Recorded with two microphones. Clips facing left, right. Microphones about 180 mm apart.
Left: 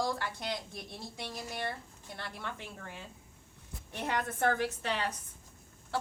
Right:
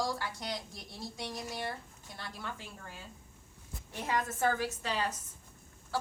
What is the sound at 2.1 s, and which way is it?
Speech, 60° left (ahead or behind).